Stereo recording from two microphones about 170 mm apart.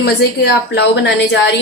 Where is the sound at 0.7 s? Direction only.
85° left.